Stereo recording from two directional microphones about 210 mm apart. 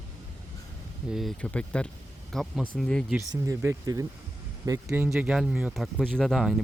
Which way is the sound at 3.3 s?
15° right (ahead or behind).